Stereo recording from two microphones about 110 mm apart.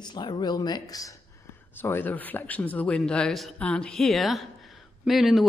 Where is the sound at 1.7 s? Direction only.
20° left (ahead or behind).